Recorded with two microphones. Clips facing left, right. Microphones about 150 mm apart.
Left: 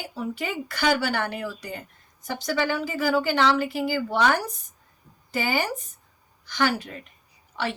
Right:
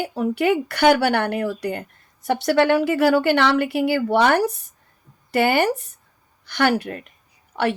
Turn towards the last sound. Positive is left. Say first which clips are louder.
# right 8 dB
turn(degrees=-55)  # may be behind; listen again after turning